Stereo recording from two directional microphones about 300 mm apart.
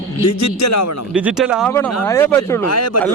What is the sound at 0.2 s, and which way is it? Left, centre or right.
Speech, left.